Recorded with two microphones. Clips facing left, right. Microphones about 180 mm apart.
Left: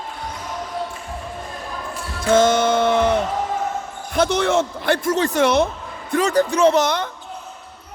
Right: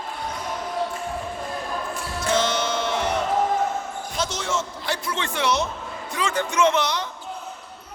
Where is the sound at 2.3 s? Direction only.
50° left (ahead or behind).